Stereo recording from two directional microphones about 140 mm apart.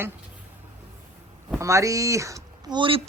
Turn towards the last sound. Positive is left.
turn(degrees=-40)  # may be behind; listen again after turning